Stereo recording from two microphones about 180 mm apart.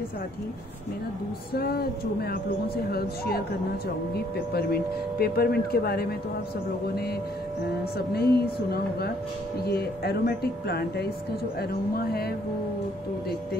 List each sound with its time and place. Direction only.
1.5 s speech: 60° left (ahead or behind)
8.1 s speech: 60° left (ahead or behind)
9.7 s speech: 60° left (ahead or behind)